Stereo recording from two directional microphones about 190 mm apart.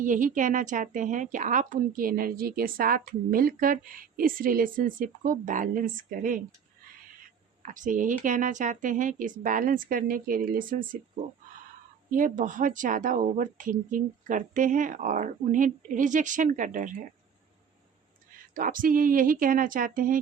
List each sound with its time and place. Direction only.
0.0 s a woman's voice: 45° right (ahead or behind)
7.6 s a woman's voice: 45° right (ahead or behind)
12.1 s a woman's voice: 45° right (ahead or behind)
18.5 s a woman's voice: 45° right (ahead or behind)